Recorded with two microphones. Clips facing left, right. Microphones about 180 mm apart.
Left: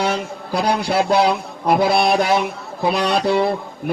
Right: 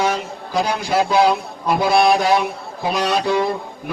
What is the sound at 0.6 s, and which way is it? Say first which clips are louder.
A man's voice: even; 60° left (ahead or behind).